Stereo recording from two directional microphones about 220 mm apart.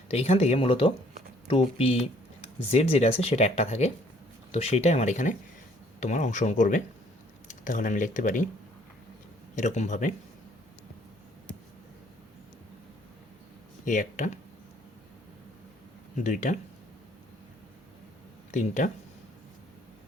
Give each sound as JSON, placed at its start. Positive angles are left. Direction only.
{"t": 0.1, "sound": "speech", "side_deg": 30}
{"t": 9.6, "sound": "speech", "side_deg": 35}
{"t": 13.8, "sound": "speech", "side_deg": 35}
{"t": 16.1, "sound": "speech", "side_deg": 35}
{"t": 18.5, "sound": "speech", "side_deg": 35}